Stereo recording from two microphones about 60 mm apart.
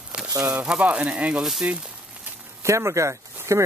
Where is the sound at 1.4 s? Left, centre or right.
Centre.